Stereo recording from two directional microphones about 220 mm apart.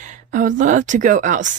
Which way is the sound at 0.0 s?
35° right (ahead or behind).